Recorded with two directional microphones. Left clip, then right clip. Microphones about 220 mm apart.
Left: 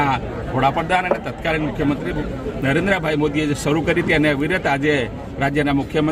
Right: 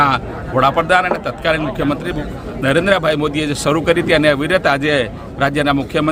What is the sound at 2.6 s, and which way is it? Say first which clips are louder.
A man's voice: right 6 dB; 15° right (ahead or behind).